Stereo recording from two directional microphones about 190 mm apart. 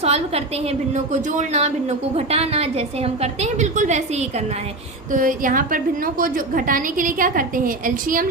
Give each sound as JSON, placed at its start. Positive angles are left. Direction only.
{"t": 0.0, "sound": "a woman's voice", "side_deg": -35}
{"t": 5.1, "sound": "a woman's voice", "side_deg": -45}